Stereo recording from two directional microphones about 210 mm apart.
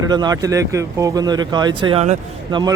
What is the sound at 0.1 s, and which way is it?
Speech, 20° right (ahead or behind).